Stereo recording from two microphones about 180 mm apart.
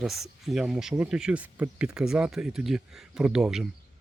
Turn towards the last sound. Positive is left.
turn(degrees=-5)  # may be behind; listen again after turning